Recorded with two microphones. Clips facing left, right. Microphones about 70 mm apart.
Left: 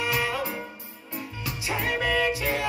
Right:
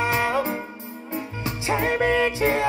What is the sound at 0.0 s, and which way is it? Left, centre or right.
Music, right.